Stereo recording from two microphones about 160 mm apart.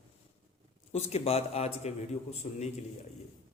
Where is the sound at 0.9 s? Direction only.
40° left (ahead or behind).